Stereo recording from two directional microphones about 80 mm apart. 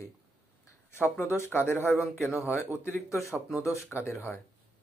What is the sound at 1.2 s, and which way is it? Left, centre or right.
Speech, left.